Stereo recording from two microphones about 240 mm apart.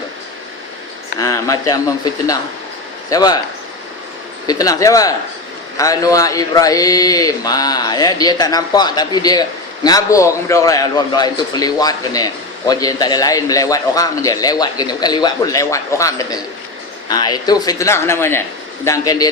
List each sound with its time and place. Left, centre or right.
1.2 s a man's voice: centre
3.1 s a man's voice: centre
4.4 s a man's voice: centre